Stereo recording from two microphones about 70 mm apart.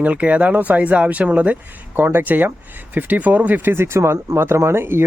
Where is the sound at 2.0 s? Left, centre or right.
Right.